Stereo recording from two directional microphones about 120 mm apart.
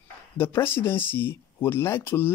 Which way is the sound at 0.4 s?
20° left (ahead or behind).